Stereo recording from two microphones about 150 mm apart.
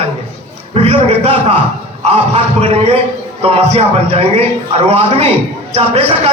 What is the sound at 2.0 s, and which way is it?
A man's voice, 40° right (ahead or behind).